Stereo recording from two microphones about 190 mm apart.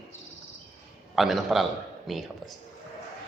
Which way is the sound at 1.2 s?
Centre (ahead or behind).